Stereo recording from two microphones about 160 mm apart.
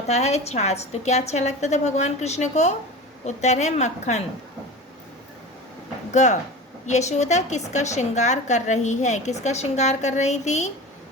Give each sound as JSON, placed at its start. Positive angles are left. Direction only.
{"t": 0.1, "sound": "a woman's voice", "side_deg": 45}
{"t": 6.2, "sound": "a woman's voice", "side_deg": 50}